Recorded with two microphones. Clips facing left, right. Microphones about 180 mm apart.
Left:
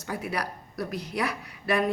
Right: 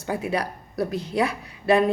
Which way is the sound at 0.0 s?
25° right (ahead or behind).